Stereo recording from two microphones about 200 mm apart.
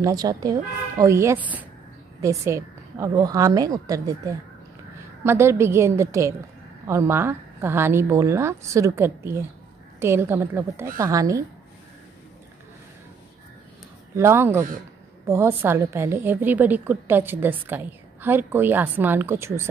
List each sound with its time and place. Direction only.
0.0 s a woman's voice: 20° right (ahead or behind)
14.1 s a woman's voice: 10° right (ahead or behind)